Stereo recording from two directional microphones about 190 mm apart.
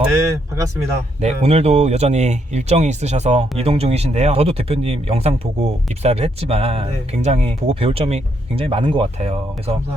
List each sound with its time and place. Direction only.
0.1 s speech: 15° right (ahead or behind)
1.2 s speech: 35° right (ahead or behind)